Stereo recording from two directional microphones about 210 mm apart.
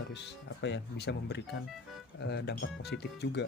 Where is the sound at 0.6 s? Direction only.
55° left (ahead or behind).